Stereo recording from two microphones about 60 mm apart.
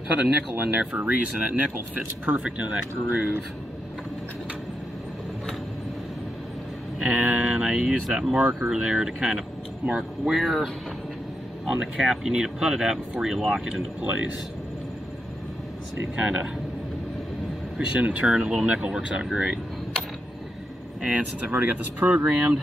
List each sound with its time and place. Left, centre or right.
0.1 s speech: right
7.0 s speech: centre
16.2 s speech: centre
17.7 s speech: right
21.0 s speech: right